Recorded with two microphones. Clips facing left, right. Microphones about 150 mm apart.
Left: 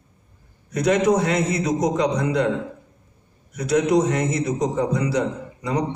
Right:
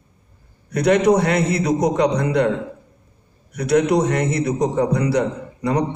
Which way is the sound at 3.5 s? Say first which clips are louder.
Right 2 dB; 65° right (ahead or behind).